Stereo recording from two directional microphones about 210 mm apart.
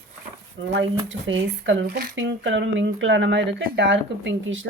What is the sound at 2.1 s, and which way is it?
Speech, 60° right (ahead or behind).